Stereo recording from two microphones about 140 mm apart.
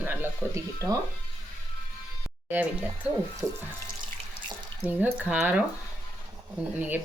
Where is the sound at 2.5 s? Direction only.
10° right (ahead or behind).